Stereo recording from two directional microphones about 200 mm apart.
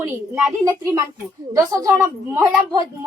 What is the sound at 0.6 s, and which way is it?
A woman's voice, 15° right (ahead or behind).